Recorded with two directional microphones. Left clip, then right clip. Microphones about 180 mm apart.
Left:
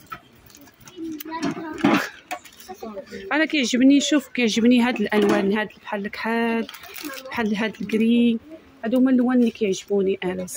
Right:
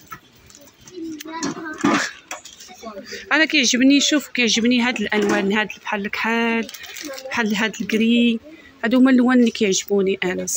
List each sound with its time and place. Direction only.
1.4 s a child's voice: 40° left (ahead or behind)
3.1 s speech: 5° left (ahead or behind)
8.8 s speech: 10° right (ahead or behind); by 10.4 s 5° left (ahead or behind)